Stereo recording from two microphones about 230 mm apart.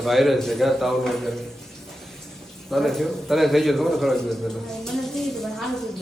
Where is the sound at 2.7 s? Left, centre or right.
Centre.